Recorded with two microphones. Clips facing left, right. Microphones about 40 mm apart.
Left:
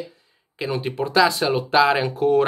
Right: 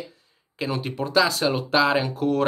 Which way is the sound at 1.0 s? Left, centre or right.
Left.